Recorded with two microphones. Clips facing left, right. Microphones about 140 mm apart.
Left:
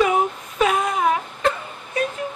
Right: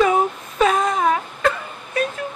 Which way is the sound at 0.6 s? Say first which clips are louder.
Right 2 dB; 10° left (ahead or behind).